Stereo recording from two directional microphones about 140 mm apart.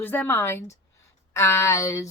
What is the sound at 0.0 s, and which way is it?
A woman's voice, 15° left (ahead or behind).